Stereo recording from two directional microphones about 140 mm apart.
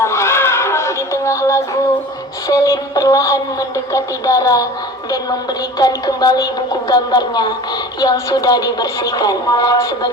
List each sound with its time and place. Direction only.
0.0 s a sound: 20° left (ahead or behind)
2.5 s speech: 25° left (ahead or behind)
5.8 s speech: 30° left (ahead or behind)